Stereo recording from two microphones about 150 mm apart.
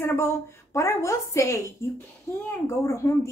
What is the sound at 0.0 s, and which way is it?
A woman's voice, 15° left (ahead or behind).